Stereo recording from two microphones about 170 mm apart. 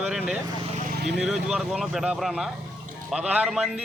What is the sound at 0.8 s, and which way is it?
Vehicle, 55° right (ahead or behind).